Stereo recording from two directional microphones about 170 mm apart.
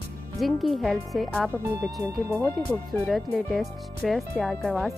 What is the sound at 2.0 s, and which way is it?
Speech, 20° right (ahead or behind).